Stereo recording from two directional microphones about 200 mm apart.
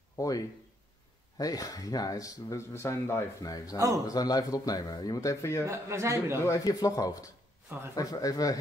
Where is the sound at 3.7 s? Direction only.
15° right (ahead or behind).